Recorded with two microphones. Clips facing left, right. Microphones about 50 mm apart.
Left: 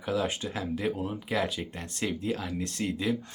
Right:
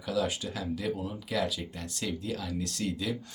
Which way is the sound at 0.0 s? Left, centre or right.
Left.